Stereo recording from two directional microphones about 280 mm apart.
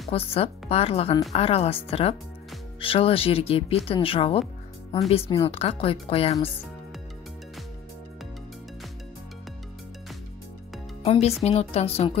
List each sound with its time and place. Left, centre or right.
0.1 s speech: centre
11.1 s speech: left